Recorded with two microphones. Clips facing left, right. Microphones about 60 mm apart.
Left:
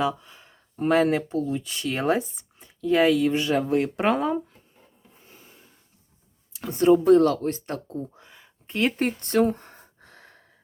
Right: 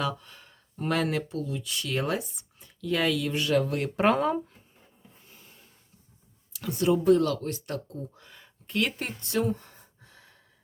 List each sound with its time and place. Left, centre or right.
0.0 s speech: centre
3.9 s speech: centre
6.5 s speech: left
9.0 s speech: left
10.0 s gasp: left